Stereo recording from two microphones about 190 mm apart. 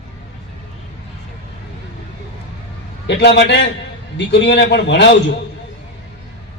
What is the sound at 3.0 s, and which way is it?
A man's voice, 65° left (ahead or behind).